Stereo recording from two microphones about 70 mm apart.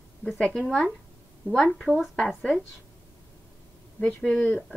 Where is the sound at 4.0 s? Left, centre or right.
Left.